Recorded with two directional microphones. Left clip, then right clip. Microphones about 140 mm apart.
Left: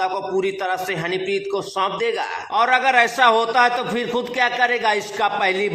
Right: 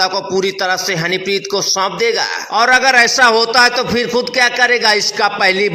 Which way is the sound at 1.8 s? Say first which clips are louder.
Right 3 dB; 25° right (ahead or behind).